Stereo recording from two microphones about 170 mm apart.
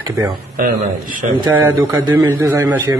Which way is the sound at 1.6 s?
15° right (ahead or behind).